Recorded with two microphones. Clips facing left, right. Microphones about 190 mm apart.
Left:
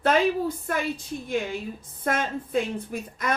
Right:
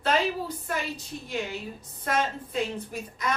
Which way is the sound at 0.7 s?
50° left (ahead or behind).